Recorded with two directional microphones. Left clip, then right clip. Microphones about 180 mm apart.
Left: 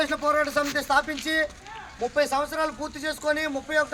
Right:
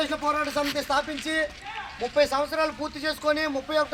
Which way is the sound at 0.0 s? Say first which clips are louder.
Left 2 dB; 25° right (ahead or behind).